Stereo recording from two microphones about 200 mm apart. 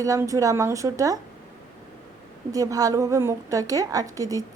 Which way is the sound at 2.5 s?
15° right (ahead or behind).